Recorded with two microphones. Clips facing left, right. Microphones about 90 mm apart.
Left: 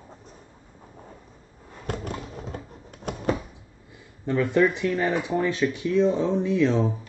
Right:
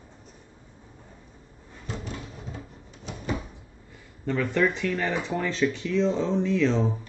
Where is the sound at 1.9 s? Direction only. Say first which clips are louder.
Left 4 dB; 55° left (ahead or behind).